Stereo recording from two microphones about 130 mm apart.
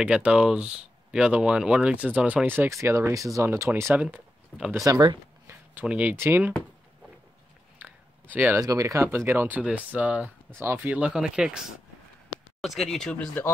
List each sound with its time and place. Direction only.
0.0 s speech: 10° right (ahead or behind)
2.6 s speech: 20° right (ahead or behind)
4.0 s speech: 10° right (ahead or behind)
4.8 s speech: 25° right (ahead or behind)
5.8 s speech: 10° right (ahead or behind)
7.8 s a sound: 15° right (ahead or behind)
8.5 s speech: 25° right (ahead or behind); by 11.6 s 5° right (ahead or behind)
12.6 s speech: centre (ahead or behind)